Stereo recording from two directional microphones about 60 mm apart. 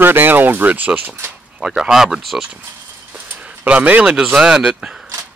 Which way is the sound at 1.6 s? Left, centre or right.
Centre.